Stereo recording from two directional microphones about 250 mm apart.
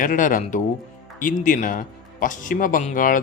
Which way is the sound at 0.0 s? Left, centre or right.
Left.